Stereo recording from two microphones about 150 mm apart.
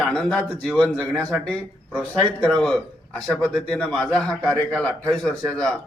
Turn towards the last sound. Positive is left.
turn(degrees=5)  # may be behind; listen again after turning